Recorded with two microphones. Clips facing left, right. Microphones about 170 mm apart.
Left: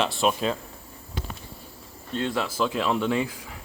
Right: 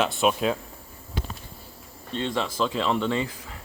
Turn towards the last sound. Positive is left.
turn(degrees=5)  # may be behind; listen again after turning